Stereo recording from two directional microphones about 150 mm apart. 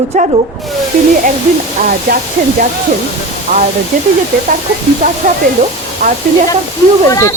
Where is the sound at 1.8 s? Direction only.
65° right (ahead or behind).